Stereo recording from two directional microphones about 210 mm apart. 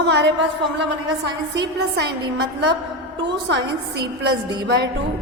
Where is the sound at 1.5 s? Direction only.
55° right (ahead or behind).